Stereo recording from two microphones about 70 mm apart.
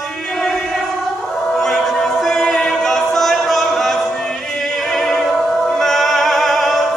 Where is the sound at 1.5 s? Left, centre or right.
Centre.